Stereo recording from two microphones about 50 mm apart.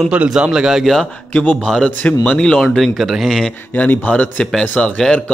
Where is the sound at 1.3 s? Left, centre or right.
Left.